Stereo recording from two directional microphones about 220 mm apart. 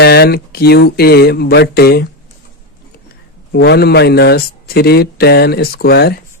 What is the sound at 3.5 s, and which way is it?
Speech, 50° left (ahead or behind).